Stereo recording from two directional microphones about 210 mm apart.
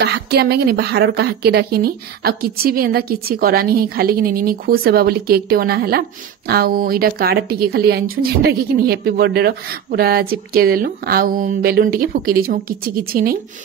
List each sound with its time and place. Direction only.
0.0 s speech: 50° right (ahead or behind)